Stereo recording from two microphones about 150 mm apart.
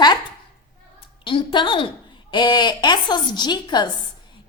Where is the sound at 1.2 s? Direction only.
35° left (ahead or behind).